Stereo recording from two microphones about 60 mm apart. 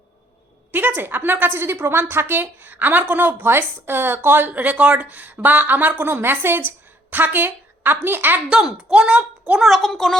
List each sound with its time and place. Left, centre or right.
0.7 s a woman's voice: right
8.9 s a child's voice: centre
9.6 s speech: centre